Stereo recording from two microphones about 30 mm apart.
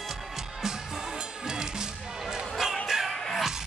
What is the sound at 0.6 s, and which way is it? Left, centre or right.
Music, right.